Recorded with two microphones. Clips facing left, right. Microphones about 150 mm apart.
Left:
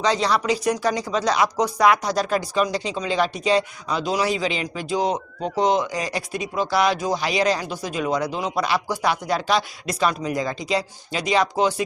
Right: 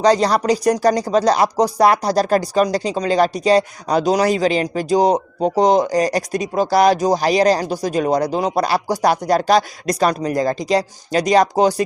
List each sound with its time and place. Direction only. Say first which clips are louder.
0.0 s a man's voice: right 6 dB; 40° right (ahead or behind)